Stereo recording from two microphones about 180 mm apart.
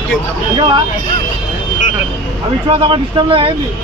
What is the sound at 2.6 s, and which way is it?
Speech, 30° right (ahead or behind).